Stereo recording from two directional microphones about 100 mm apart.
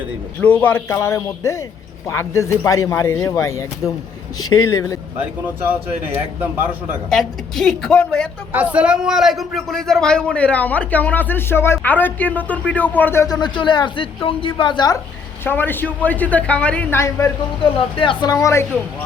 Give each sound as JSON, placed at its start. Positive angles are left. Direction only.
{"t": 0.4, "sound": "speech", "side_deg": 20}
{"t": 6.1, "sound": "speech", "side_deg": -20}
{"t": 7.1, "sound": "a woman's voice", "side_deg": 5}
{"t": 8.5, "sound": "a man's voice", "side_deg": -15}
{"t": 13.2, "sound": "speech", "side_deg": 45}
{"t": 15.4, "sound": "a man's voice", "side_deg": 20}
{"t": 16.9, "sound": "speech", "side_deg": 25}
{"t": 17.6, "sound": "speech", "side_deg": 60}
{"t": 18.3, "sound": "speech", "side_deg": 30}